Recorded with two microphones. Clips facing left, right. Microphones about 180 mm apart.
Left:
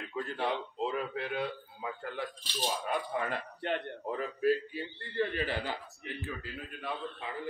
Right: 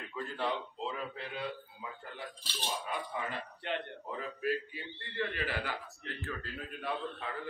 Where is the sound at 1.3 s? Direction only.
60° left (ahead or behind).